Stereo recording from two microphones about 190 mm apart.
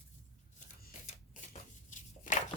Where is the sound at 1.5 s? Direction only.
40° left (ahead or behind).